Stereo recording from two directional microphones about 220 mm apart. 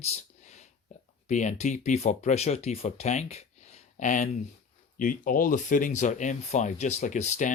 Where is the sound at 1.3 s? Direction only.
30° left (ahead or behind).